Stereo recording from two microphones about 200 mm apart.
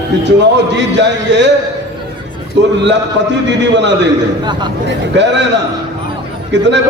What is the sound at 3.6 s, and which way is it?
A man's voice, 60° right (ahead or behind).